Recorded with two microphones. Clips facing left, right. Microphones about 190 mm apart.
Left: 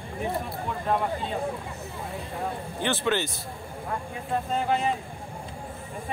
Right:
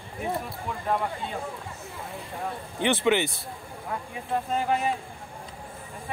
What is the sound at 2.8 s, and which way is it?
Speech, 15° right (ahead or behind).